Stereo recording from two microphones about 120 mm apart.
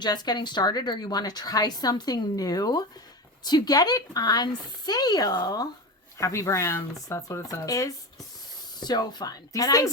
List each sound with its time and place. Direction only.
0.0 s a woman's voice: 35° left (ahead or behind)